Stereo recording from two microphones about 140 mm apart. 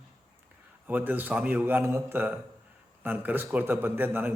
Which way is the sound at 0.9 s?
10° right (ahead or behind).